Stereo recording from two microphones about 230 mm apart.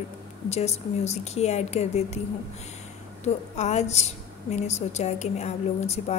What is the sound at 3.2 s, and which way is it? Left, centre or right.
A woman's voice, left.